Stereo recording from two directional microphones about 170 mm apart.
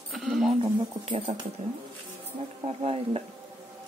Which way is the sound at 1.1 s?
40° right (ahead or behind).